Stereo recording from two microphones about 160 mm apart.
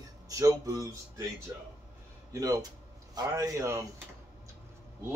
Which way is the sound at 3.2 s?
20° right (ahead or behind).